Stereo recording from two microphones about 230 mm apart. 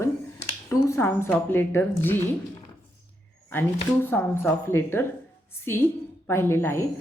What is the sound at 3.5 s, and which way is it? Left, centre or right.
A woman's voice, centre.